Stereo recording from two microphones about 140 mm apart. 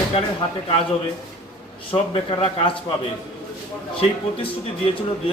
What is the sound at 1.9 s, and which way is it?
Speech, 40° left (ahead or behind).